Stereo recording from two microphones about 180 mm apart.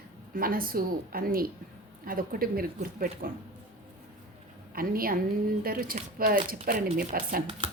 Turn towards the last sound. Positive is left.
turn(degrees=-25)  # may be behind; listen again after turning